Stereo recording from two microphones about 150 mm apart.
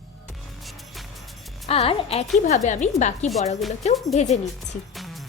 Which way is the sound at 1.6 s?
40° left (ahead or behind).